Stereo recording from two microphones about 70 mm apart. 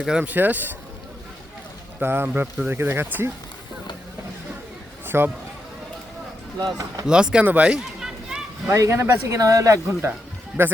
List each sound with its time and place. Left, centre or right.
0.2 s speech: right
2.0 s speech: right
5.0 s speech: right
6.6 s speech: right
7.1 s speech: centre
7.4 s a sound: centre
8.7 s speech: right
10.6 s speech: right